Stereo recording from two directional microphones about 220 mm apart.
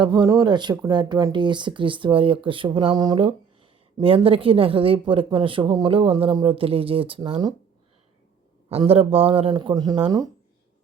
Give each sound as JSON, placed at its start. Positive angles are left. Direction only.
{"t": 0.0, "sound": "speech", "side_deg": -20}
{"t": 8.7, "sound": "speech", "side_deg": -25}